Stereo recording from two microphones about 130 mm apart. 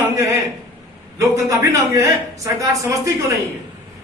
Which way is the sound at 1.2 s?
25° right (ahead or behind).